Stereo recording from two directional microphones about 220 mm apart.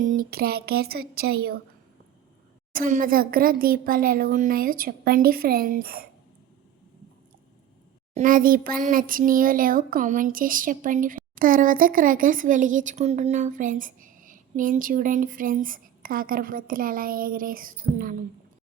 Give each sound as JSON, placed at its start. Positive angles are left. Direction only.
{"t": 0.0, "sound": "speech", "side_deg": -40}
{"t": 2.7, "sound": "speech", "side_deg": -40}
{"t": 8.1, "sound": "speech", "side_deg": -40}